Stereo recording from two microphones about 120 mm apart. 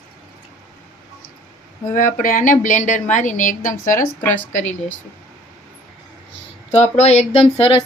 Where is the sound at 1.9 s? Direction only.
90° left.